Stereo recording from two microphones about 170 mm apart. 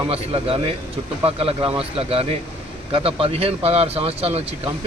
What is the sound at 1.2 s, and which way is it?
A man's voice, 35° right (ahead or behind).